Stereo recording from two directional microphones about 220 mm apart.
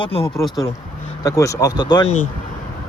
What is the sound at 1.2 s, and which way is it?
Speech, 15° left (ahead or behind).